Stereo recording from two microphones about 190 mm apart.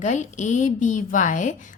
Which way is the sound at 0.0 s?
40° left (ahead or behind).